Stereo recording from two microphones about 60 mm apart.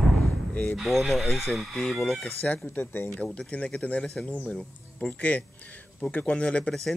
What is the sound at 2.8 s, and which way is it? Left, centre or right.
Speech, left.